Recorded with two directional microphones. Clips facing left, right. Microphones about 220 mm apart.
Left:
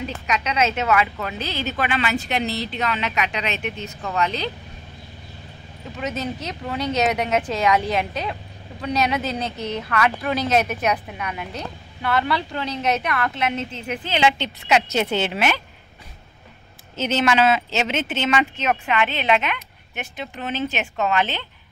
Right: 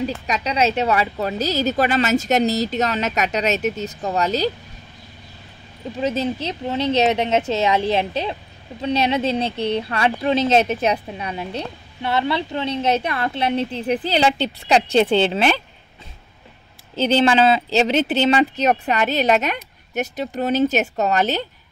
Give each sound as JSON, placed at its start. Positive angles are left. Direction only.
{"t": 0.0, "sound": "speech", "side_deg": -35}
{"t": 5.9, "sound": "speech", "side_deg": -30}
{"t": 16.9, "sound": "speech", "side_deg": -30}